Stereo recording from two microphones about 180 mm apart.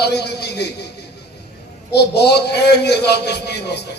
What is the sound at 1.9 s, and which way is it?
A man's voice, 65° left (ahead or behind).